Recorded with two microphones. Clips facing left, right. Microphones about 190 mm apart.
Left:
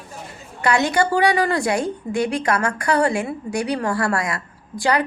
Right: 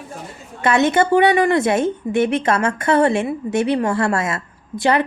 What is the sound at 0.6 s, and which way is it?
A woman's voice, 20° right (ahead or behind).